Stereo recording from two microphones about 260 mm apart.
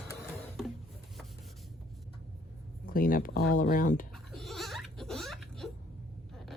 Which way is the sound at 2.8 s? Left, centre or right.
Left.